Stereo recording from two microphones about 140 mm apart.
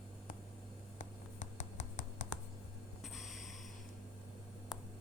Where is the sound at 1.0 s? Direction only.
60° left (ahead or behind).